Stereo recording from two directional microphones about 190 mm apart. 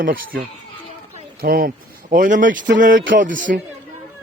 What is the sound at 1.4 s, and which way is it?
Speech, 50° right (ahead or behind).